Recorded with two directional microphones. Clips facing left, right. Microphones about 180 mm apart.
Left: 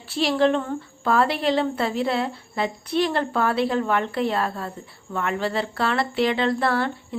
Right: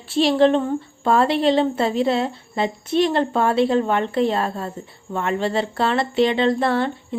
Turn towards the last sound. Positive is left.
turn(degrees=-25)  # may be behind; listen again after turning